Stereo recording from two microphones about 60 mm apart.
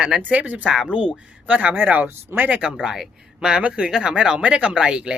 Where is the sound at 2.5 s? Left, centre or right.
Centre.